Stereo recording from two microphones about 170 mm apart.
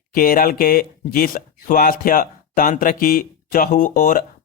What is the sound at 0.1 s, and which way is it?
Speech, 55° left (ahead or behind).